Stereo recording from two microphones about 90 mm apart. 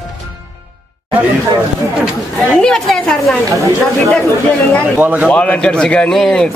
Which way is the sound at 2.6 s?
5° left (ahead or behind).